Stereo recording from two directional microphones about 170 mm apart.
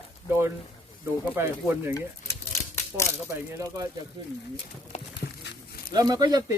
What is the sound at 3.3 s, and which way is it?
Speech, 15° right (ahead or behind).